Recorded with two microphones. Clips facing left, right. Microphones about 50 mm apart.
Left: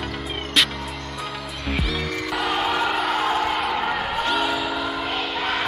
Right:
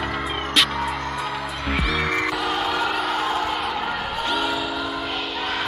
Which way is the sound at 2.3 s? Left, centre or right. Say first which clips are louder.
Left 1 dB; centre.